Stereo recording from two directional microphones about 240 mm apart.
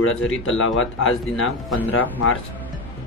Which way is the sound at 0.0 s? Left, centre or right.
Left.